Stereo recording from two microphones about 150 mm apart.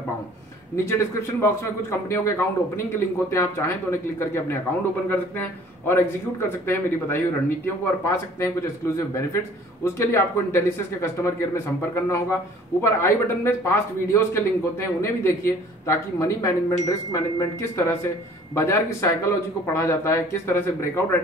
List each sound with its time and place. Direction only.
1.4 s a man's voice: 15° left (ahead or behind)